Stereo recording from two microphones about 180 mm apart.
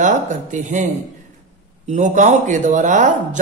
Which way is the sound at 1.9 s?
45° right (ahead or behind).